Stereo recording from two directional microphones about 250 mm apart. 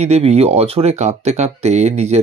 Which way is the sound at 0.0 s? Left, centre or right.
Right.